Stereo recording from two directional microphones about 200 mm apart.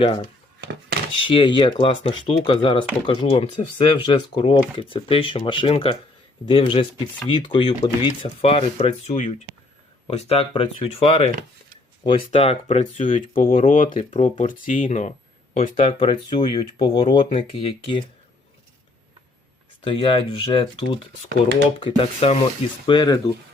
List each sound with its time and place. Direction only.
0.6 s a sound: 60° right (ahead or behind)
1.2 s speech: 25° left (ahead or behind)
19.8 s speech: 25° left (ahead or behind)